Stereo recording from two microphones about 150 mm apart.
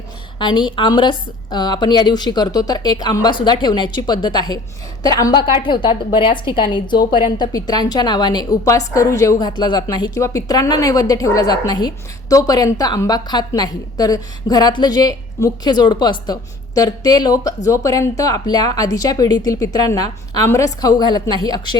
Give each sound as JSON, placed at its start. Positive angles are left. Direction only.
{"t": 0.3, "sound": "a woman's voice", "side_deg": 30}